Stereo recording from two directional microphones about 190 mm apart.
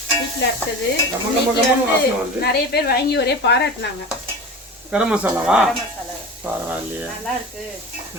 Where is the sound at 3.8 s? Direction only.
70° left (ahead or behind).